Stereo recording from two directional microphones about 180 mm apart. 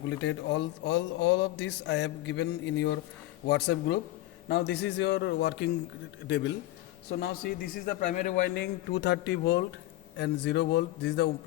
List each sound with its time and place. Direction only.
0.1 s a man's voice: 80° left
7.2 s a man's voice: 55° left (ahead or behind)
8.6 s a man's voice: 75° left (ahead or behind)